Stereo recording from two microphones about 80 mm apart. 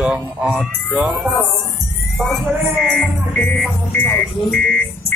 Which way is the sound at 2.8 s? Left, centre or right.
Centre.